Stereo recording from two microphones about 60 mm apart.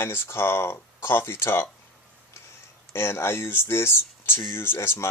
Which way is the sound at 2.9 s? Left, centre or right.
Left.